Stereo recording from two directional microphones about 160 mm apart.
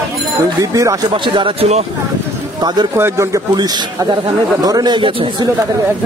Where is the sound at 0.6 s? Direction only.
20° right (ahead or behind).